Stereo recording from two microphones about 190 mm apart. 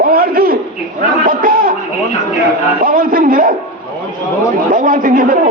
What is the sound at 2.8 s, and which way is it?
Speech, 50° right (ahead or behind).